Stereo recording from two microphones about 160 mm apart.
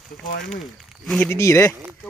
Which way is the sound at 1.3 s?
20° left (ahead or behind).